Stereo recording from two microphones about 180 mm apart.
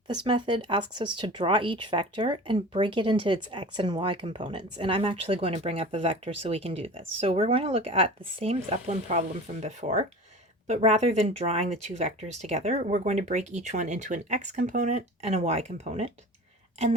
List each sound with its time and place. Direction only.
0.1 s speech: 25° right (ahead or behind)